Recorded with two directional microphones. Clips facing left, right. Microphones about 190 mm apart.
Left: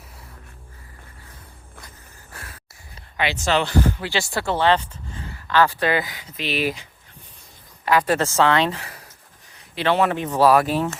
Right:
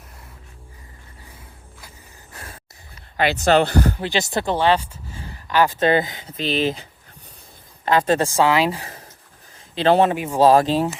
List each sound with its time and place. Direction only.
2.3 s a sound: 20° right (ahead or behind)
3.3 s speech: 55° right (ahead or behind)
4.0 s speech: 20° right (ahead or behind)
7.9 s a woman's voice: 25° right (ahead or behind); by 8.8 s 10° right (ahead or behind)
9.7 s speech: 30° right (ahead or behind)
10.1 s a woman's voice: 10° right (ahead or behind)
10.4 s speech: 25° right (ahead or behind)